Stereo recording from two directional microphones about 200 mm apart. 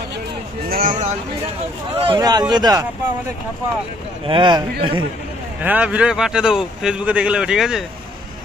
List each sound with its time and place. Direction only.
0.7 s a sound: 45° right (ahead or behind)
2.0 s a man's voice: 25° right (ahead or behind)
4.3 s a man's voice: 25° right (ahead or behind)
5.6 s speech: 5° right (ahead or behind)